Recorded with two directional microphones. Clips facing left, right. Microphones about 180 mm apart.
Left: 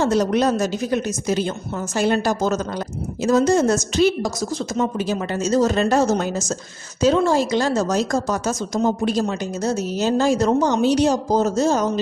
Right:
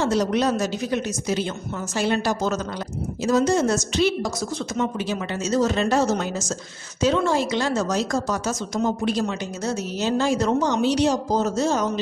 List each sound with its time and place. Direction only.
0.0 s a woman's voice: 50° left (ahead or behind)